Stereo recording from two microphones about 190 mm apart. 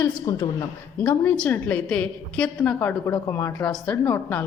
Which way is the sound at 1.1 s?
10° left (ahead or behind).